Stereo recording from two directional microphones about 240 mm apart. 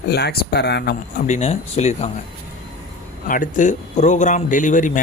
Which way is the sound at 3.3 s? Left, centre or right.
Left.